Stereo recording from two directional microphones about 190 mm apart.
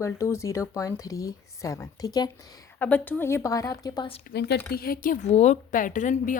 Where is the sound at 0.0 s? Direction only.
15° left (ahead or behind).